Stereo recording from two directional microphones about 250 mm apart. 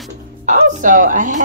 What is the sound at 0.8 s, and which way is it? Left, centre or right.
Speech, right.